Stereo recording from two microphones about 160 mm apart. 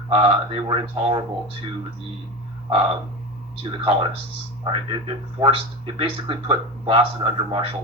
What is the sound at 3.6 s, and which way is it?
Speech, 35° right (ahead or behind).